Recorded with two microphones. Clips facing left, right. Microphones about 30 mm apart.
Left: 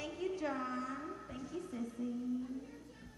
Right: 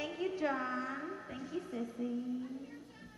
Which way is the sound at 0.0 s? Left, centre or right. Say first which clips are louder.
Right 3 dB; centre.